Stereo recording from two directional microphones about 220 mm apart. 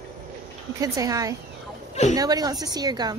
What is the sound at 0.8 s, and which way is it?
A woman's voice, 15° right (ahead or behind).